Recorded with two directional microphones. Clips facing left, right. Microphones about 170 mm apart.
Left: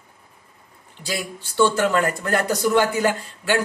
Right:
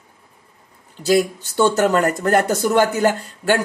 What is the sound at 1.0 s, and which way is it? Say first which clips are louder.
Speech: right 12 dB; 45° right (ahead or behind).